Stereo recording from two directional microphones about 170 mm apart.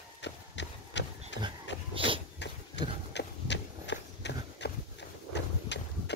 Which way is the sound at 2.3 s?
90° left.